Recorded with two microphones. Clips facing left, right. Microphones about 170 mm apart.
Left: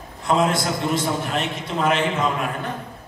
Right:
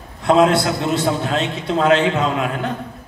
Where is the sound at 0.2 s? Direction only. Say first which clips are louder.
Right 6 dB; 75° right (ahead or behind); by 2.7 s 90° right.